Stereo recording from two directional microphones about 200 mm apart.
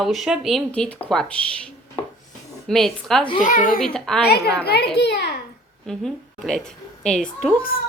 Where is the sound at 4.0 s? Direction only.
Centre (ahead or behind).